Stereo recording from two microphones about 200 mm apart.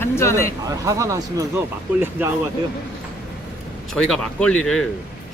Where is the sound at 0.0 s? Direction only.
15° left (ahead or behind).